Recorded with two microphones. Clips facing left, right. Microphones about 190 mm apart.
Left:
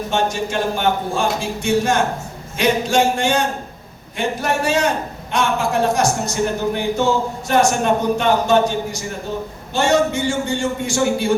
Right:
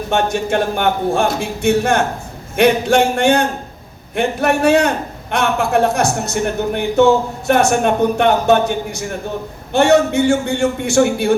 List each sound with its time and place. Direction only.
0.1 s speech: 60° right (ahead or behind)